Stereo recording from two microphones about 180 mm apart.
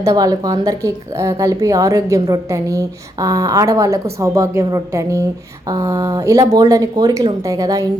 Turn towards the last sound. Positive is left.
turn(degrees=-20)  # may be behind; listen again after turning